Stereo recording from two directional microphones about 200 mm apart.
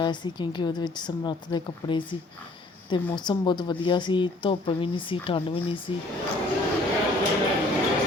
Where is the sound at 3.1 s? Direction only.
20° left (ahead or behind).